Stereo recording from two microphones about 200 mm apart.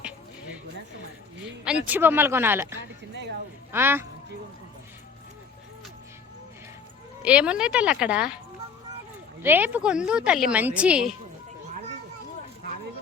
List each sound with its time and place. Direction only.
1.6 s speech: 5° right (ahead or behind)
7.2 s a woman's voice: 5° right (ahead or behind)
9.4 s a woman's voice: 10° right (ahead or behind)